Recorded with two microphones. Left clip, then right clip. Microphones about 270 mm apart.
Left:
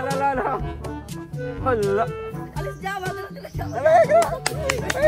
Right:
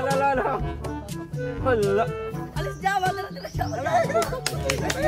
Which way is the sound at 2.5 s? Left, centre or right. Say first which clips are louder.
Right 5 dB; centre.